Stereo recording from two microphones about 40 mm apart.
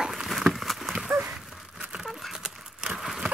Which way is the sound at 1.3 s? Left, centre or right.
Right.